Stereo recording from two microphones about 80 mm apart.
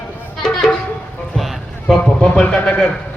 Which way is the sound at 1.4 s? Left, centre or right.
Centre.